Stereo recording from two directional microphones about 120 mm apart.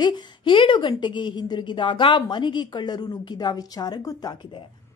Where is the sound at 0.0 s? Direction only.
45° left (ahead or behind).